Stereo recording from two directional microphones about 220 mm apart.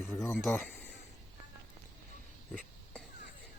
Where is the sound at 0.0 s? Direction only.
10° left (ahead or behind).